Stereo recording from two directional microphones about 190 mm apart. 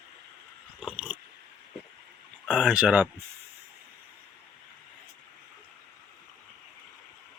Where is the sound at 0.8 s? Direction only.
5° right (ahead or behind).